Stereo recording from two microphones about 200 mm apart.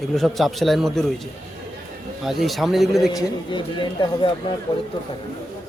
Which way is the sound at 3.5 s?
25° left (ahead or behind).